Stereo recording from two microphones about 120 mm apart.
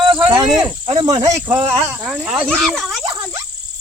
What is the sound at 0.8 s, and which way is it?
Insect, 40° right (ahead or behind).